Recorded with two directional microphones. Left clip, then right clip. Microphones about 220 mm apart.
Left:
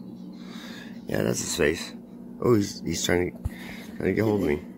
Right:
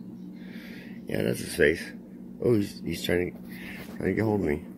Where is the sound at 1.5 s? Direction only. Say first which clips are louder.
Right 3 dB; 15° left (ahead or behind).